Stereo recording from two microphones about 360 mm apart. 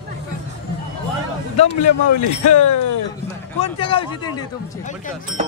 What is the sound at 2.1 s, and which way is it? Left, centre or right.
Speech, left.